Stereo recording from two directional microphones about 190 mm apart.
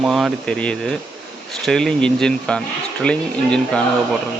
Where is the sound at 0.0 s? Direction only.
Centre (ahead or behind).